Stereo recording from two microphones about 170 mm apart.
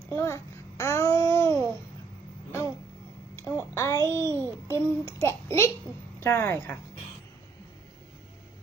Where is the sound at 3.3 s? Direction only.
15° left (ahead or behind).